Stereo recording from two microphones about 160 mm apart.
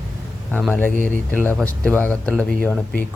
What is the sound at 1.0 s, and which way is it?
Speech, 10° left (ahead or behind).